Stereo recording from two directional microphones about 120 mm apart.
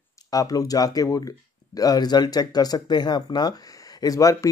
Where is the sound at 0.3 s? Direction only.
30° left (ahead or behind).